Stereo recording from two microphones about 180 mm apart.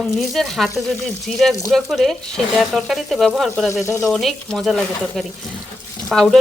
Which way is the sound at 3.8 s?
15° left (ahead or behind).